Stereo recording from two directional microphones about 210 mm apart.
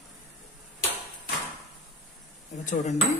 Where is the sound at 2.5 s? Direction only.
35° left (ahead or behind).